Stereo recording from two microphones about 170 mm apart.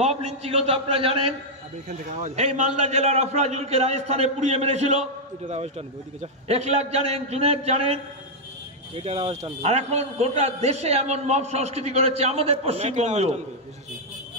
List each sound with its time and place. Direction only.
0.0 s a man's voice: 40° right (ahead or behind)